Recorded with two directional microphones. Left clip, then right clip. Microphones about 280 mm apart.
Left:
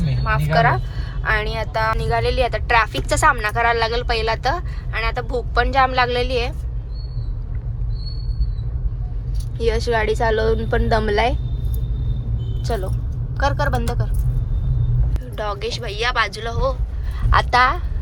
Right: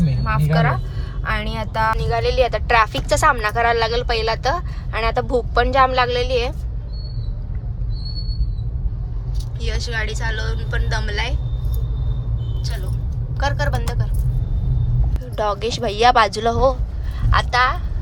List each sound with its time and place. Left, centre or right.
0.3 s speech: centre
9.6 s a woman's voice: centre
13.3 s speech: centre
15.4 s speech: centre
17.2 s speech: centre